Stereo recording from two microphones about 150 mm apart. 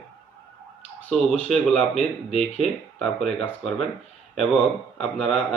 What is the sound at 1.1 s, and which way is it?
Speech, centre (ahead or behind).